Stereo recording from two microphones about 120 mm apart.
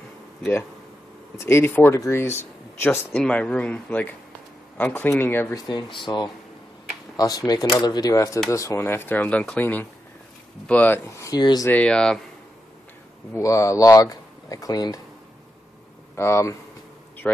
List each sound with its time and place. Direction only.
1.4 s speech: 20° left (ahead or behind)
5.7 s speech: 40° left (ahead or behind); by 11.0 s 15° left (ahead or behind)
11.1 s speech: 25° left (ahead or behind)
11.7 s speech: 10° left (ahead or behind)
13.3 s speech: 25° left (ahead or behind)
16.2 s speech: 25° left (ahead or behind)